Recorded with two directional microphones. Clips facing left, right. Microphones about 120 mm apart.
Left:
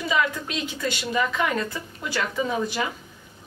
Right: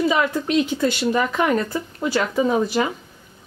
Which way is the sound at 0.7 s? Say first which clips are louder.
Right 6 dB; 40° right (ahead or behind).